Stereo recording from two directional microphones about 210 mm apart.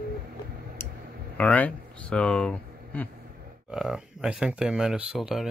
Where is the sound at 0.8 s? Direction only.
10° left (ahead or behind).